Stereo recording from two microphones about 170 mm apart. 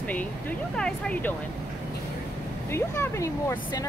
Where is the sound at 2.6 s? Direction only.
15° left (ahead or behind).